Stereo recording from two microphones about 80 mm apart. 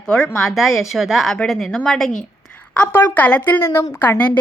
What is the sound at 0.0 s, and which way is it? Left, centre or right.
A woman's voice, centre.